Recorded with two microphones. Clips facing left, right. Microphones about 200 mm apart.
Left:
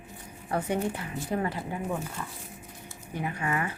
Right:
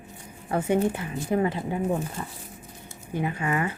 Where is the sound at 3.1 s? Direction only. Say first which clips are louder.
Right 4 dB; 25° right (ahead or behind).